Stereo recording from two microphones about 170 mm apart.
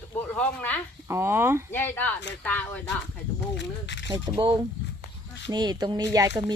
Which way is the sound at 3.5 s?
90° left.